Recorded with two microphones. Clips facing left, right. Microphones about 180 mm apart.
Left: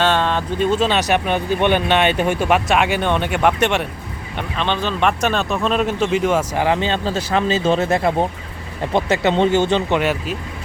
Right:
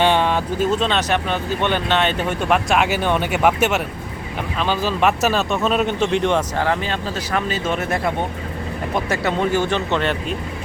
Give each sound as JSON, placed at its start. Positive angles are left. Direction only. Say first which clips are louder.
{"t": 0.0, "sound": "a sound", "louder": "right 1 dB", "side_deg": -15}
{"t": 0.7, "sound": "speech", "louder": "left 4 dB", "side_deg": 5}
{"t": 2.5, "sound": "speech", "louder": "right 2 dB", "side_deg": 0}
{"t": 6.6, "sound": "speech", "louder": "left 3 dB", "side_deg": 20}
{"t": 10.0, "sound": "speech", "louder": "left 2 dB", "side_deg": 5}